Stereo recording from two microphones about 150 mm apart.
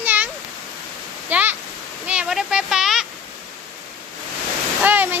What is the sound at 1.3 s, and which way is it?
Speech, 10° right (ahead or behind).